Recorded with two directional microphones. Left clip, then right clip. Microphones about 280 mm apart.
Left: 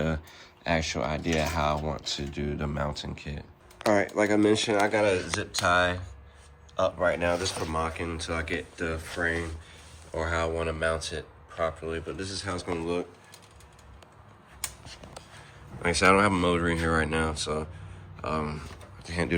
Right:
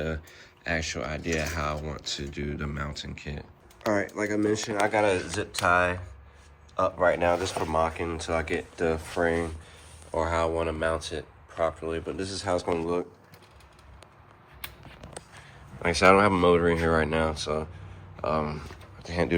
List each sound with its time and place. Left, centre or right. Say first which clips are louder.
0.0 s speech: left 2 dB; centre
6.8 s speech: right 2 dB; centre
10.6 s speech: right 1 dB; centre
15.8 s speech: right 2 dB; centre